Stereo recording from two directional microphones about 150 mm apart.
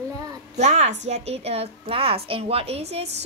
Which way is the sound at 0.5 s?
50° right (ahead or behind).